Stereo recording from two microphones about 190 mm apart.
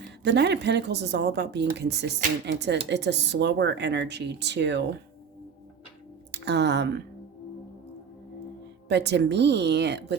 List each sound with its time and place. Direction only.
0.3 s speech: 60° right (ahead or behind)
6.3 s speech: 65° right (ahead or behind)
8.9 s speech: 65° right (ahead or behind)